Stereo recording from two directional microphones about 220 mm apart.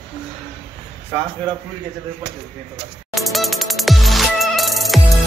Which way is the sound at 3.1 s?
Centre (ahead or behind).